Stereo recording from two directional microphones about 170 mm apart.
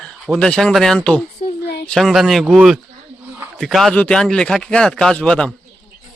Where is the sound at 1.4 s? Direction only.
45° left (ahead or behind).